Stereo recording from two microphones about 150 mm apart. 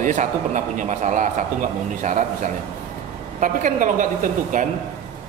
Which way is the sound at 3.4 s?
60° right (ahead or behind).